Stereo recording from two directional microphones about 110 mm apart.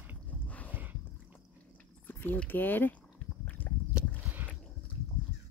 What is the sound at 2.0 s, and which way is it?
Speech, 15° left (ahead or behind).